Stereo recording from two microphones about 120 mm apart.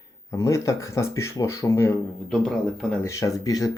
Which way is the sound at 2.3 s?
5° left (ahead or behind).